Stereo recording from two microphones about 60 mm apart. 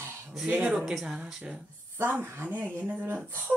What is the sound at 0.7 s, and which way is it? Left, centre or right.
Speech, centre.